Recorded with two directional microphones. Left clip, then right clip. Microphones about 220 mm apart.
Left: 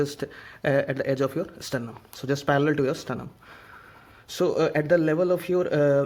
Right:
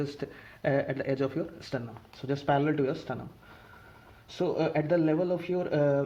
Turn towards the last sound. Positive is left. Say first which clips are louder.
# left 6 dB
turn(degrees=40)  # may be behind; listen again after turning